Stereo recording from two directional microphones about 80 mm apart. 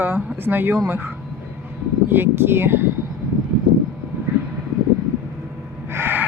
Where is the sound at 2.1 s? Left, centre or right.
Right.